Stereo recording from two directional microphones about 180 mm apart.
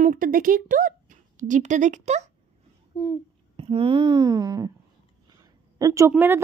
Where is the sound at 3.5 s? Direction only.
30° right (ahead or behind).